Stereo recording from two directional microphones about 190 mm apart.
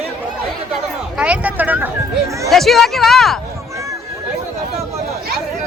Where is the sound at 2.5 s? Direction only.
Centre (ahead or behind).